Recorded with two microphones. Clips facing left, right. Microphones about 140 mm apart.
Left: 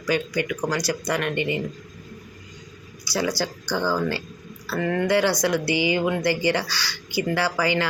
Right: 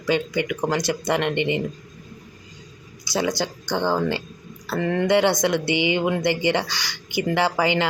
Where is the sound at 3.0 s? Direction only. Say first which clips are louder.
Right 1 dB; 20° right (ahead or behind).